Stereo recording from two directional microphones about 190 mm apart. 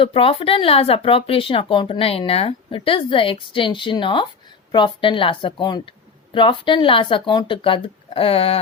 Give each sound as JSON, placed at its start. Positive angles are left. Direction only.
{"t": 0.0, "sound": "speech", "side_deg": 30}